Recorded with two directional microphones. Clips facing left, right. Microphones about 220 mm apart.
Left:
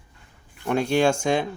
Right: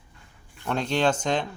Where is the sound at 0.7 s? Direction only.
10° left (ahead or behind).